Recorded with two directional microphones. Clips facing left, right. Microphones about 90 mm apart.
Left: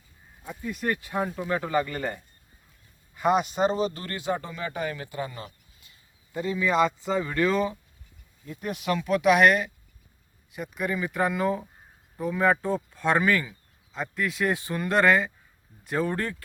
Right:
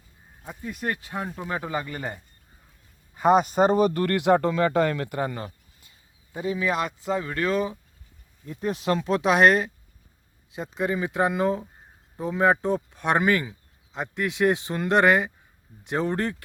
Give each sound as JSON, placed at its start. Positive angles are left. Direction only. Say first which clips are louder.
{"t": 0.8, "sound": "speech", "louder": "left 2 dB", "side_deg": -25}
{"t": 3.2, "sound": "speech", "louder": "right 4 dB", "side_deg": -40}
{"t": 5.2, "sound": "a sound", "louder": "right 6 dB", "side_deg": -45}
{"t": 6.3, "sound": "speech", "louder": "even", "side_deg": -15}
{"t": 6.7, "sound": "speech", "louder": "left 3 dB", "side_deg": -5}
{"t": 8.4, "sound": "speech", "louder": "right 3 dB", "side_deg": -30}